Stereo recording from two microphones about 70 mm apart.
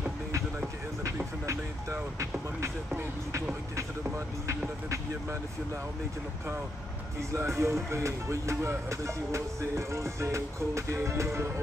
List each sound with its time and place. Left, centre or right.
1.4 s vehicle: right
4.8 s music: right
7.3 s music: right